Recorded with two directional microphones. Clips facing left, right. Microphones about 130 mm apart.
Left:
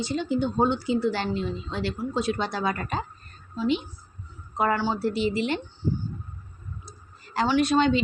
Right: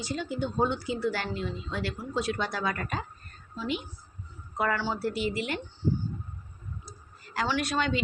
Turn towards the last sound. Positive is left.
turn(degrees=25)  # may be behind; listen again after turning